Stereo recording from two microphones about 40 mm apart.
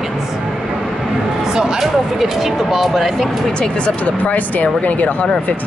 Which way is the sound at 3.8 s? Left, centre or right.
Left.